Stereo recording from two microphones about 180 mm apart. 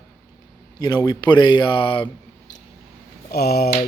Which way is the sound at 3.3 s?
60° left (ahead or behind).